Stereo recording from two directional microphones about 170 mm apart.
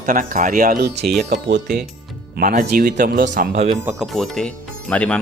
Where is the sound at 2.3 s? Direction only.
55° right (ahead or behind).